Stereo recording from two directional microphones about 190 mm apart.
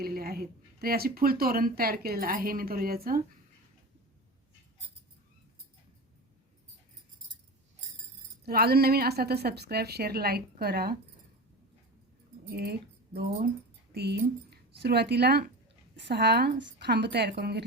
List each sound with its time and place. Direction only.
0.0 s speech: 55° right (ahead or behind)
8.4 s a woman's voice: 55° right (ahead or behind)
12.5 s a woman's voice: 55° right (ahead or behind)
13.9 s a woman's voice: 60° right (ahead or behind)